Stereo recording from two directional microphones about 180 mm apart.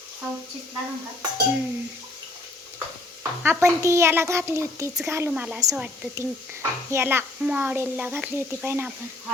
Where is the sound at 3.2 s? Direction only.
15° right (ahead or behind).